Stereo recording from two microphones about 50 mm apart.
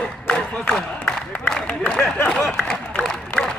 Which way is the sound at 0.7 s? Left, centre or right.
Centre.